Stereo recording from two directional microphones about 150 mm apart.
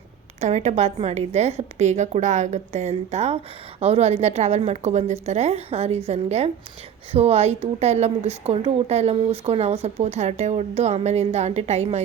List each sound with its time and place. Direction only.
0.3 s a woman's voice: 50° right (ahead or behind)